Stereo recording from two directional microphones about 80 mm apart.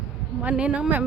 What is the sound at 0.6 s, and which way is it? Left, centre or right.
Speech, centre.